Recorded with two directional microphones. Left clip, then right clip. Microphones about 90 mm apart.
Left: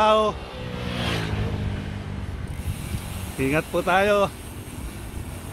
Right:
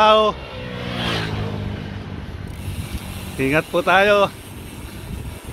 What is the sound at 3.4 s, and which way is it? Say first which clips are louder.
Speech: right 5 dB; centre (ahead or behind).